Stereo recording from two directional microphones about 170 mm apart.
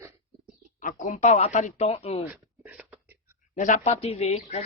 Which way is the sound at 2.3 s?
5° right (ahead or behind).